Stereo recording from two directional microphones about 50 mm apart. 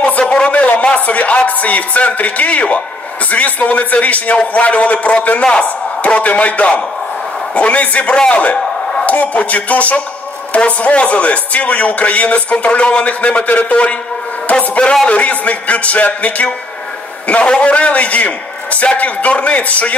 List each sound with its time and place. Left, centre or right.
0.0 s speech: left